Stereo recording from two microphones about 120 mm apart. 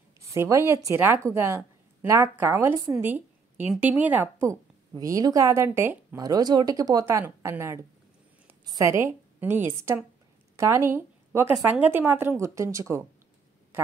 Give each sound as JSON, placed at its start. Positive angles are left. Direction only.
{"t": 0.3, "sound": "a woman's voice", "side_deg": -25}
{"t": 3.0, "sound": "a sound", "side_deg": -15}
{"t": 4.0, "sound": "speech", "side_deg": -15}
{"t": 4.9, "sound": "a woman's voice", "side_deg": -30}
{"t": 6.2, "sound": "a woman's voice", "side_deg": -35}